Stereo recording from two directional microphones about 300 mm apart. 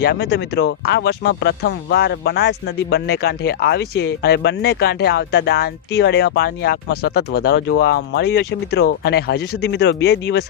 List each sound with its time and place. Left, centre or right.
0.0 s speech: left